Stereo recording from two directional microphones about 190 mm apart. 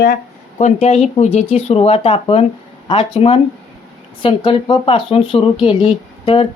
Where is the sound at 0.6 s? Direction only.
35° left (ahead or behind).